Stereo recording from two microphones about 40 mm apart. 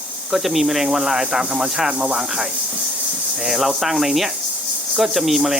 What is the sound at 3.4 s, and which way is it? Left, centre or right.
Speech, centre.